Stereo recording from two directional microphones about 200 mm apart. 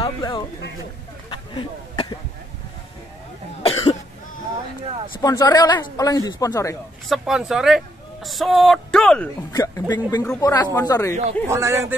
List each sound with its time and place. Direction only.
0.0 s a sound: 20° left (ahead or behind)
3.6 s cough: 30° left (ahead or behind)
5.2 s speech: 20° left (ahead or behind)
7.1 s speech: centre (ahead or behind)
9.5 s speech: 20° left (ahead or behind)
11.4 s speech: 15° right (ahead or behind)